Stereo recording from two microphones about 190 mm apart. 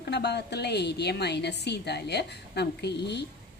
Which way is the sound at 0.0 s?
60° left (ahead or behind).